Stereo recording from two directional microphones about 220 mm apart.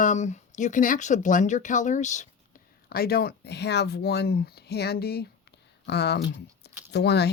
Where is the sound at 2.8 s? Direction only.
45° left (ahead or behind).